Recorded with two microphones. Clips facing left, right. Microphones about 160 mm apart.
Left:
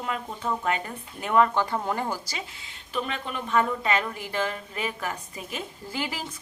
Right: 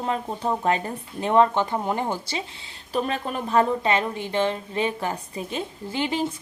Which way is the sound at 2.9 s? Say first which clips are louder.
Right 5 dB; 40° right (ahead or behind).